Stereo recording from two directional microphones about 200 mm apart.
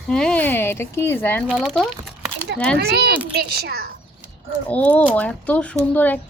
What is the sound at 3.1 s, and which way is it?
Speech, 10° right (ahead or behind).